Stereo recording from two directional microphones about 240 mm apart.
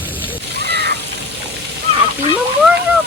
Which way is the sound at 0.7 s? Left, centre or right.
Right.